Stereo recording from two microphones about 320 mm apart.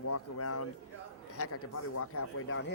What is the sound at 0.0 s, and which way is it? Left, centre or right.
A man's voice, left.